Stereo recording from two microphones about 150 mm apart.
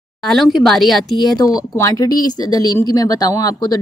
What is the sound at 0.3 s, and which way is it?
Speech, centre (ahead or behind).